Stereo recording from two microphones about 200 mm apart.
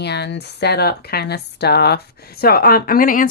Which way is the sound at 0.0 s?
55° left (ahead or behind).